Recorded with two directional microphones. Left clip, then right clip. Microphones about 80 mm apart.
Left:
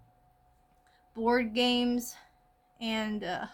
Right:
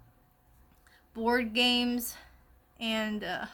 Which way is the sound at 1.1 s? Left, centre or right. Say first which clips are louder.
Even; right.